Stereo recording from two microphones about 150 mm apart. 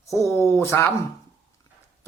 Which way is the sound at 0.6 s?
15° left (ahead or behind).